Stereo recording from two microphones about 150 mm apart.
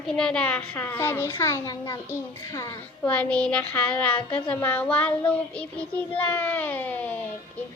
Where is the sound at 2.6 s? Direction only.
10° left (ahead or behind).